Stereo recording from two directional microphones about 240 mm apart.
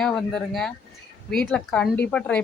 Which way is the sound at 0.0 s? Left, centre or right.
Centre.